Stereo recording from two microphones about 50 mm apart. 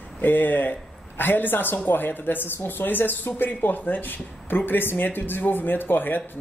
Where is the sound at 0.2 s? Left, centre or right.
Left.